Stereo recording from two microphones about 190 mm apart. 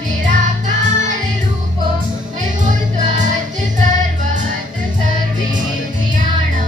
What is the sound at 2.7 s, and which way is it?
Music, 40° right (ahead or behind).